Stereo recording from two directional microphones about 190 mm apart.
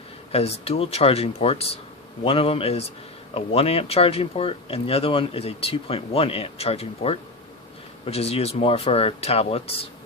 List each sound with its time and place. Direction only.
0.3 s speech: 30° left (ahead or behind)